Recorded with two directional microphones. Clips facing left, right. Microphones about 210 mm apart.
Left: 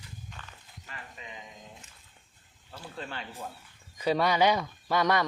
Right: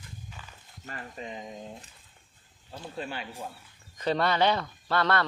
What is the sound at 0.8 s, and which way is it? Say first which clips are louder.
Speech: right 7 dB; 45° right (ahead or behind).